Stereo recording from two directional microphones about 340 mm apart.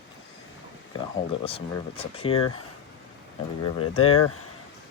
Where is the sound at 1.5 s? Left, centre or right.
Centre.